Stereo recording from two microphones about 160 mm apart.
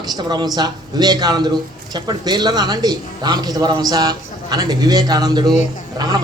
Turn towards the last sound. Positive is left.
turn(degrees=-25)  # may be behind; listen again after turning